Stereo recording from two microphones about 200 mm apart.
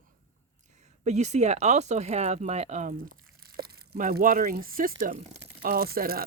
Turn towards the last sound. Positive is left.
turn(degrees=-50)  # may be behind; listen again after turning